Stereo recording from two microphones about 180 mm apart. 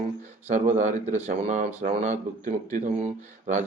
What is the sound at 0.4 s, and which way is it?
A man's voice, 40° right (ahead or behind).